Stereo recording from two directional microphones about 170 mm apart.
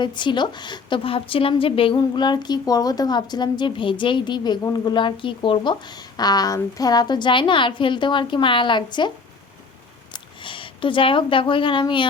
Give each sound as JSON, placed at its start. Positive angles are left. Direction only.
{"t": 0.0, "sound": "a woman's voice", "side_deg": 25}